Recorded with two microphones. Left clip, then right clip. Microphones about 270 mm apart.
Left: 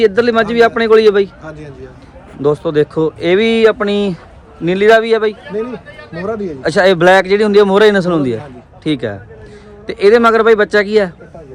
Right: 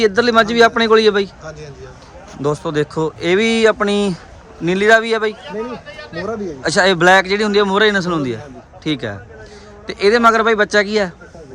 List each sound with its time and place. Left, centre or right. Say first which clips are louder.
0.0 s speech: left 2 dB; centre
1.5 s a sound: left 2 dB; left
2.4 s speech: left 6 dB; centre
6.6 s speech: left 3 dB; centre